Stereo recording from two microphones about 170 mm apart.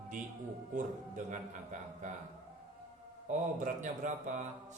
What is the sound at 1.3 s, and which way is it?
Speech, 45° right (ahead or behind).